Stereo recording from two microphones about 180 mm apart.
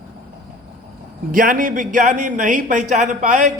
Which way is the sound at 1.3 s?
50° right (ahead or behind).